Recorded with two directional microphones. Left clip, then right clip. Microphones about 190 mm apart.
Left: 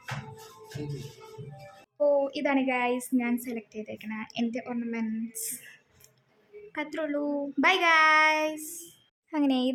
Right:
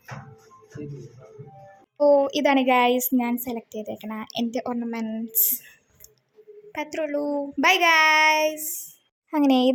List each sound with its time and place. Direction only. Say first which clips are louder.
2.0 s a woman's voice: right 7 dB; 25° right (ahead or behind)
6.7 s a child's voice: right 4 dB; 10° right (ahead or behind)
9.3 s a woman's voice: right 7 dB; 30° right (ahead or behind)